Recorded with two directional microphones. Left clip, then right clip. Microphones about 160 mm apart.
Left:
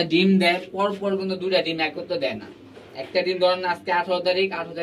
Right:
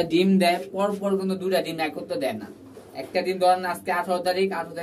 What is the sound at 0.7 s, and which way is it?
A man's voice, 15° right (ahead or behind).